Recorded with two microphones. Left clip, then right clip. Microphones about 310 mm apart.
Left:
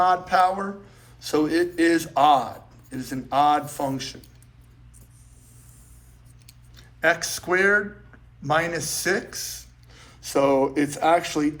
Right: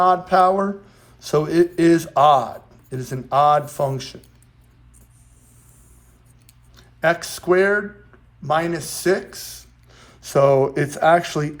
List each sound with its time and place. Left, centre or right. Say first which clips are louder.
0.0 s speech: right 4 dB; centre
6.7 s speech: right 2 dB; centre